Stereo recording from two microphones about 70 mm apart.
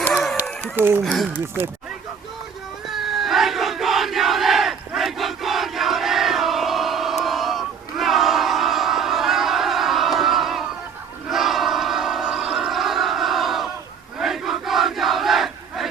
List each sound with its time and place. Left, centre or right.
0.8 s speech: right
2.9 s battle cry: centre
4.9 s crowd: centre
12.2 s music: centre
14.2 s battle cry: centre